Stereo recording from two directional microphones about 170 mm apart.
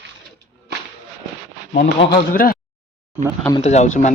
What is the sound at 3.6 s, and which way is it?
Speech, 40° left (ahead or behind).